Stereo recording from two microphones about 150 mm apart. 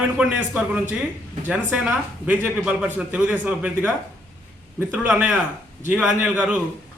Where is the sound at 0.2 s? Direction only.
10° right (ahead or behind).